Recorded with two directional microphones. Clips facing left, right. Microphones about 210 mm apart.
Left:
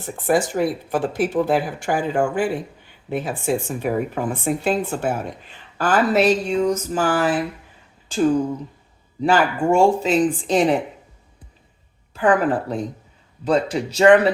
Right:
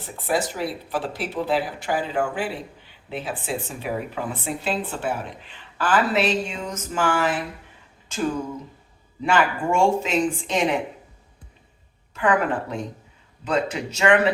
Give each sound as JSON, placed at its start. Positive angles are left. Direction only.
{"t": 0.3, "sound": "speech", "side_deg": 50}
{"t": 12.1, "sound": "speech", "side_deg": 35}